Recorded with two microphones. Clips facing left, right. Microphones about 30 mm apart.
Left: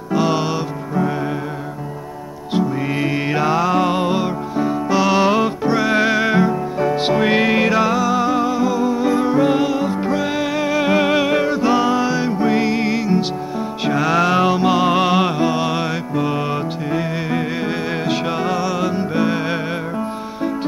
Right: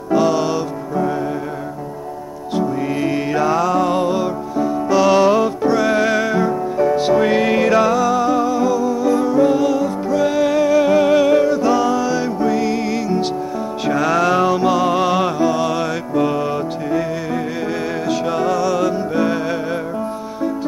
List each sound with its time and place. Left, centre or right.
0.3 s music: centre
2.9 s music: left
7.2 s music: left
18.0 s music: left